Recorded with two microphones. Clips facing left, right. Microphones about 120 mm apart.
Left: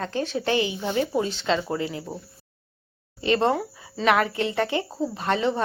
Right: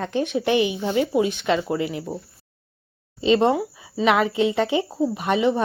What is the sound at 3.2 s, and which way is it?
Speech, 15° right (ahead or behind).